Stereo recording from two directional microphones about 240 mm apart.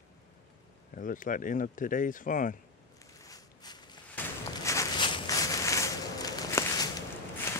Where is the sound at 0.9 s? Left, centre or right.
Left.